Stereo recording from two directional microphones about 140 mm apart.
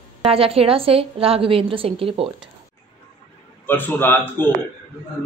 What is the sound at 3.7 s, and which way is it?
Speech, 15° left (ahead or behind).